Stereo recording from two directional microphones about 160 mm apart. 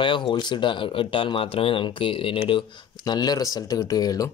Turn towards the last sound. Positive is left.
turn(degrees=25)  # may be behind; listen again after turning